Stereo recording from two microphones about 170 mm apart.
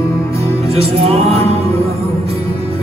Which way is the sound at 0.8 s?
35° right (ahead or behind).